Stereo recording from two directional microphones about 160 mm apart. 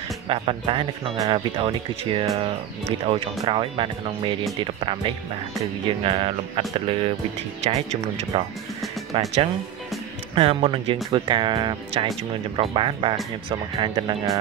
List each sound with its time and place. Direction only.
0.3 s speech: 35° right (ahead or behind)
5.9 s speech: 35° right (ahead or behind)